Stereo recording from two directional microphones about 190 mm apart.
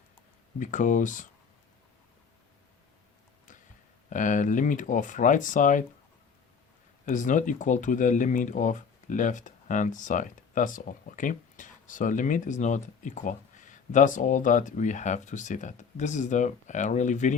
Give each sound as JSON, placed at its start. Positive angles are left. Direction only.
{"t": 0.6, "sound": "speech", "side_deg": 40}
{"t": 4.1, "sound": "speech", "side_deg": 40}
{"t": 7.0, "sound": "speech", "side_deg": 40}